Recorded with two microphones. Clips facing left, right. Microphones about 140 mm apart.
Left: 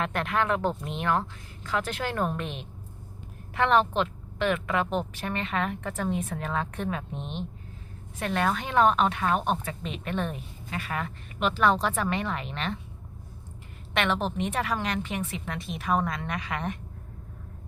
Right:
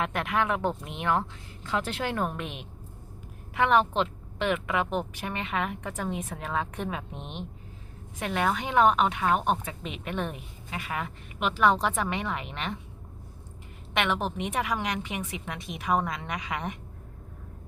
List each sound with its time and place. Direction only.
0.0 s a woman's voice: 15° right (ahead or behind)
1.6 s a woman's voice: 25° right (ahead or behind)
13.9 s a woman's voice: 15° right (ahead or behind)